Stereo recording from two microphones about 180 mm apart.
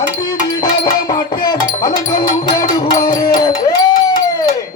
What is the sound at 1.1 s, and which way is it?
Music, 25° left (ahead or behind).